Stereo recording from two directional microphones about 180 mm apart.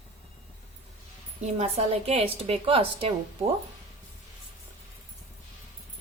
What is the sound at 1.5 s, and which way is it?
A woman's voice, 35° right (ahead or behind).